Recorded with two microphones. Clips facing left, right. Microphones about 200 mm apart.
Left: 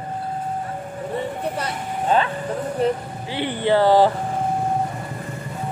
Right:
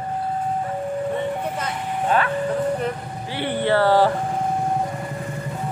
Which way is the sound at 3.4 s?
15° left (ahead or behind).